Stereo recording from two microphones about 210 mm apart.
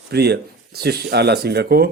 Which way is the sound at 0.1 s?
50° right (ahead or behind).